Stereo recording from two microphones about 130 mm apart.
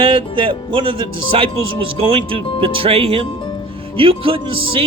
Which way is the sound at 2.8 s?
50° right (ahead or behind).